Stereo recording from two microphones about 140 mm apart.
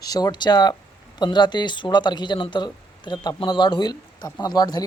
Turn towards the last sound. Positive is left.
turn(degrees=30)  # may be behind; listen again after turning